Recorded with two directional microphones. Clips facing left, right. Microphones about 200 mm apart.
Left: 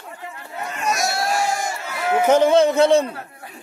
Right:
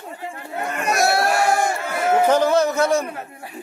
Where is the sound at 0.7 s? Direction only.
60° right (ahead or behind).